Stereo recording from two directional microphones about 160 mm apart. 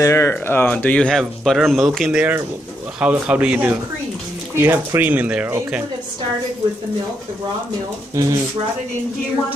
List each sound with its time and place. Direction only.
0.0 s speech: 15° left (ahead or behind); by 5.8 s 5° right (ahead or behind)
8.2 s speech: 20° right (ahead or behind)